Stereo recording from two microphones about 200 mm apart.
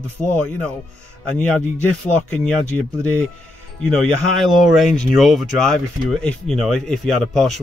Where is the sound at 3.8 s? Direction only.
Centre (ahead or behind).